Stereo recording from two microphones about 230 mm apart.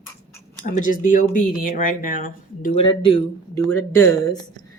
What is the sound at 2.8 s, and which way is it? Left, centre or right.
Speech, left.